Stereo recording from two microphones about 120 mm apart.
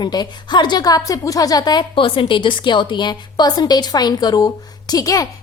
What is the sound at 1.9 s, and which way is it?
A woman's voice, 45° left (ahead or behind).